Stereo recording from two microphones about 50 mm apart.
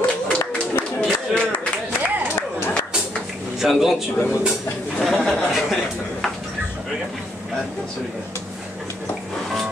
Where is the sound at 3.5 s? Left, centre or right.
Centre.